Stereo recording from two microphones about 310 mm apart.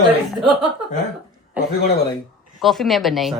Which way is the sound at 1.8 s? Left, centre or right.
Left.